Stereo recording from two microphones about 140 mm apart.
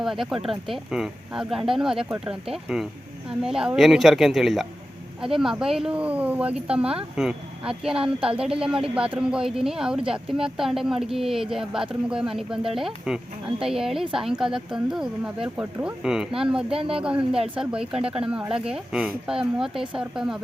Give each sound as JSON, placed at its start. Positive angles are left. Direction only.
{"t": 0.0, "sound": "speech", "side_deg": 0}
{"t": 16.7, "sound": "speech", "side_deg": -40}
{"t": 17.0, "sound": "speech", "side_deg": -10}
{"t": 17.3, "sound": "speech", "side_deg": -40}
{"t": 17.6, "sound": "speech", "side_deg": -5}